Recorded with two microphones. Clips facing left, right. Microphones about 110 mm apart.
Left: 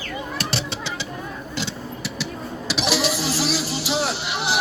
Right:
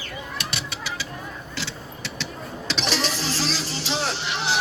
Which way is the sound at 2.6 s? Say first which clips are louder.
Left 4 dB; 10° left (ahead or behind).